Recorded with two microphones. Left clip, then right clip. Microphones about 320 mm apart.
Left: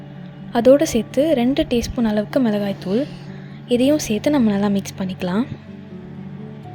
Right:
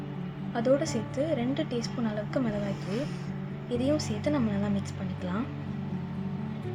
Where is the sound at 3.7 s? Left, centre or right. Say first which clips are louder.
Left 12 dB; left.